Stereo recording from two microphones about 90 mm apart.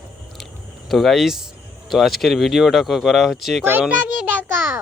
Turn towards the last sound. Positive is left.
turn(degrees=-20)  # may be behind; listen again after turning